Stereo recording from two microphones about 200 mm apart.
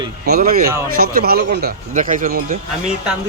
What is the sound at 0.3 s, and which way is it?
Speech, 50° right (ahead or behind).